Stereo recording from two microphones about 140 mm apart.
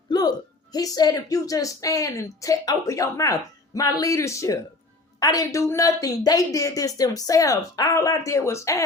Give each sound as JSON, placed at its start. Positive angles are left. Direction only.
{"t": 0.1, "sound": "a woman's voice", "side_deg": 30}